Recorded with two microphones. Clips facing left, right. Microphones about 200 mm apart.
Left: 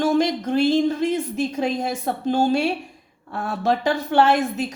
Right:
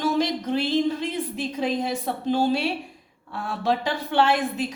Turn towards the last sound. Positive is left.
turn(degrees=45)  # may be behind; listen again after turning